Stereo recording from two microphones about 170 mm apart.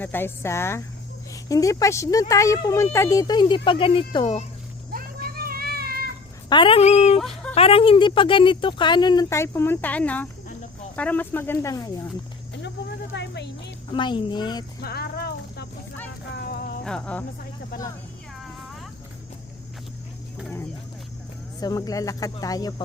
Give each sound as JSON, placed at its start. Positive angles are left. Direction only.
{"t": 0.0, "sound": "speech", "side_deg": 10}
{"t": 4.9, "sound": "vehicle", "side_deg": -60}
{"t": 6.5, "sound": "speech", "side_deg": 30}
{"t": 7.2, "sound": "speech", "side_deg": 0}
{"t": 7.5, "sound": "speech", "side_deg": 35}
{"t": 13.1, "sound": "a sound", "side_deg": 90}
{"t": 13.9, "sound": "speech", "side_deg": 25}
{"t": 14.8, "sound": "a sound", "side_deg": 65}
{"t": 16.8, "sound": "speech", "side_deg": 5}
{"t": 21.6, "sound": "speech", "side_deg": 20}